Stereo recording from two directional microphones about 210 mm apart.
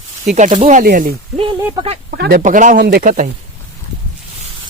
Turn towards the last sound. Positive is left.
turn(degrees=-40)  # may be behind; listen again after turning